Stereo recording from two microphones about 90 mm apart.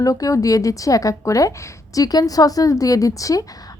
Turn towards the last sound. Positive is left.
turn(degrees=40)  # may be behind; listen again after turning